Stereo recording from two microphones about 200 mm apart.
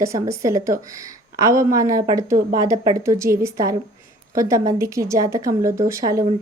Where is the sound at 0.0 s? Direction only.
15° right (ahead or behind).